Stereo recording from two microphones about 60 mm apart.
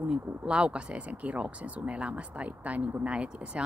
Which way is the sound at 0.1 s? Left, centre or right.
Centre.